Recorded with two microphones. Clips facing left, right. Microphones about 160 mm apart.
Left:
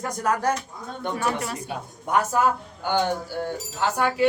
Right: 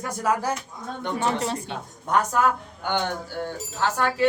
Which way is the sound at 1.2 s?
25° right (ahead or behind).